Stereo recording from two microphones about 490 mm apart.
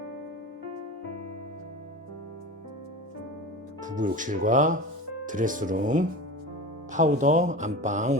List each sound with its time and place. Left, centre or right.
3.8 s speech: centre